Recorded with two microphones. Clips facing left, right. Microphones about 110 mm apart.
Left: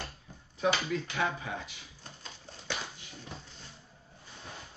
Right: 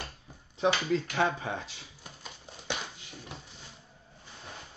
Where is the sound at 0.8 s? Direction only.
30° right (ahead or behind).